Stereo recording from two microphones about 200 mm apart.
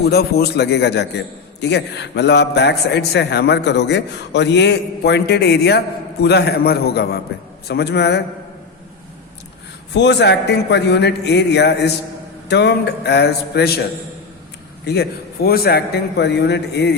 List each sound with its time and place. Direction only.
0.0 s a man's voice: 50° left (ahead or behind)
9.9 s a man's voice: 60° left (ahead or behind)
14.8 s a man's voice: 50° left (ahead or behind)